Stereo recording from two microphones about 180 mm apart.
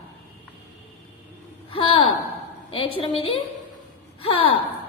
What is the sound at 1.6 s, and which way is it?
A woman's voice, 30° left (ahead or behind).